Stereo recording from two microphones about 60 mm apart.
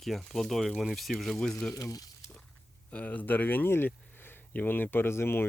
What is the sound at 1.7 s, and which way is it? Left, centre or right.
Speech, left.